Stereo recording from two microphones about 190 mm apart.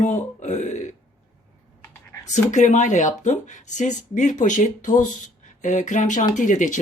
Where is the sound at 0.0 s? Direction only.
40° left (ahead or behind).